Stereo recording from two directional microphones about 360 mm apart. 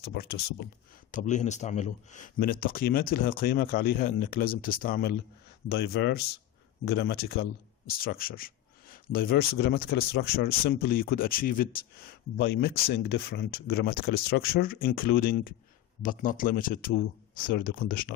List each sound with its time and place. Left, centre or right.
0.0 s speech: left